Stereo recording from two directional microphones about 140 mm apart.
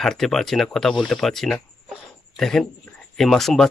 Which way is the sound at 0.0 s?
5° left (ahead or behind).